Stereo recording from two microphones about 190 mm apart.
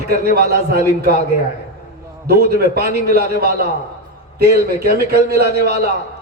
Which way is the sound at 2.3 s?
55° right (ahead or behind).